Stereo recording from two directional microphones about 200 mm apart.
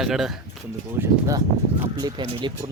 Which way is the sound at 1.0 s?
15° right (ahead or behind).